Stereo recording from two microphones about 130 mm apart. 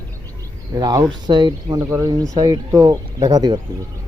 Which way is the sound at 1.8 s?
20° right (ahead or behind).